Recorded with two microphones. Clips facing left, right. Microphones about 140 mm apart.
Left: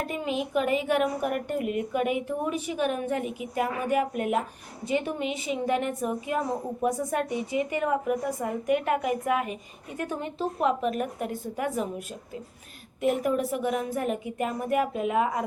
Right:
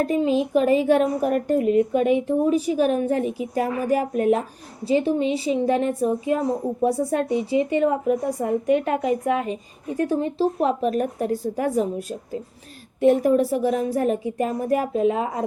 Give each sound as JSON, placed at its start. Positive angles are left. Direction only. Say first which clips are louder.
{"t": 0.0, "sound": "speech", "louder": "right 9 dB", "side_deg": -35}